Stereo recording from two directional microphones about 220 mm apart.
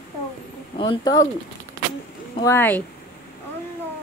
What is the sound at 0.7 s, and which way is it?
Speech, 20° left (ahead or behind).